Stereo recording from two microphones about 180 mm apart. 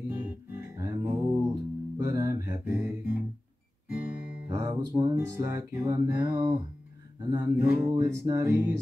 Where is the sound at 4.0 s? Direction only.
10° right (ahead or behind).